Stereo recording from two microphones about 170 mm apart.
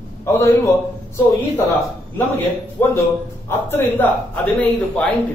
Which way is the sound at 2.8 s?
10° left (ahead or behind).